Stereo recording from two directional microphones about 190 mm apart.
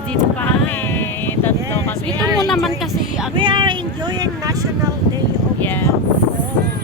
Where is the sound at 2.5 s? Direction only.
Centre (ahead or behind).